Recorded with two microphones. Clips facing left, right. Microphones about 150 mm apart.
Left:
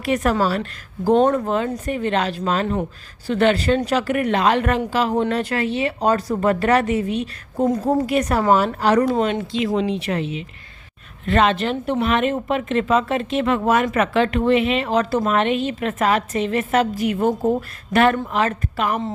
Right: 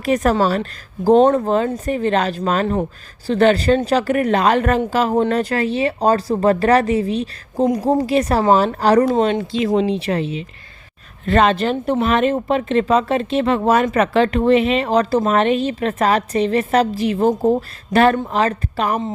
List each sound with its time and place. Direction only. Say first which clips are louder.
0.0 s speech: right 3 dB; 40° right (ahead or behind)
7.6 s a woman's voice: right 2 dB; 15° right (ahead or behind)
8.0 s speech: right 3 dB; 30° right (ahead or behind)